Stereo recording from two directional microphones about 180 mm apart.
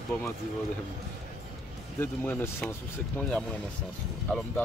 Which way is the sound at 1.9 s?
10° left (ahead or behind).